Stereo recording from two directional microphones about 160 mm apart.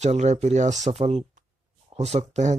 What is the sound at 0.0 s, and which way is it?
Speech, 45° right (ahead or behind).